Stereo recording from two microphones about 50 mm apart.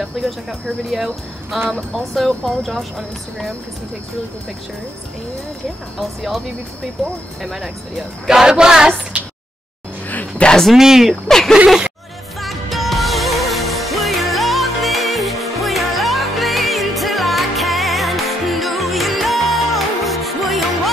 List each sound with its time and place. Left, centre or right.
0.0 s speech: centre
7.4 s speech: centre
8.3 s speech: centre
10.0 s a sound: left
10.8 s speech: centre
11.2 s a sound: centre
12.4 s music: centre